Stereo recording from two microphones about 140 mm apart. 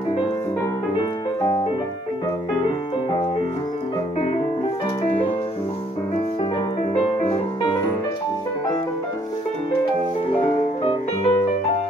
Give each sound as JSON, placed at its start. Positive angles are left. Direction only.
{"t": 7.0, "sound": "music", "side_deg": 45}
{"t": 10.4, "sound": "music", "side_deg": 40}